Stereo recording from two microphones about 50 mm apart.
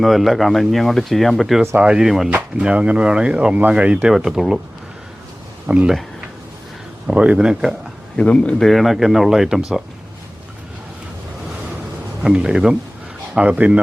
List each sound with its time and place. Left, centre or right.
0.0 s speech: centre
1.7 s speech: centre
2.0 s speech: centre
2.6 s speech: right
4.1 s speech: centre
5.7 s speech: right
7.1 s speech: right
7.3 s speech: centre
8.1 s speech: left
8.5 s speech: centre
12.2 s speech: centre
13.4 s speech: right